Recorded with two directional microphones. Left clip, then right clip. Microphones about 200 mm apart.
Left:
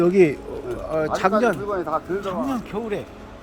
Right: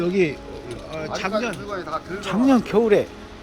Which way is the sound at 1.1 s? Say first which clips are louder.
Left 5 dB; 35° left (ahead or behind).